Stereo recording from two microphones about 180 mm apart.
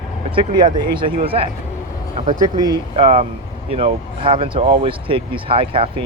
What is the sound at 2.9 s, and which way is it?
Speech, 35° right (ahead or behind).